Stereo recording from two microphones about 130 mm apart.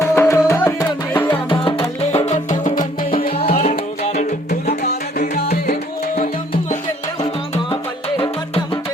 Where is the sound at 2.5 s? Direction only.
80° left.